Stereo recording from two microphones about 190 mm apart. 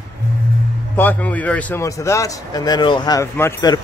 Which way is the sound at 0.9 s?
10° left (ahead or behind).